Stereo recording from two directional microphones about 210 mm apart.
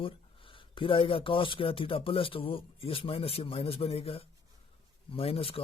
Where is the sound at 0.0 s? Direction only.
25° left (ahead or behind).